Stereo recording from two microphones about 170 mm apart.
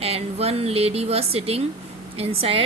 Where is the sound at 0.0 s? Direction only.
35° right (ahead or behind).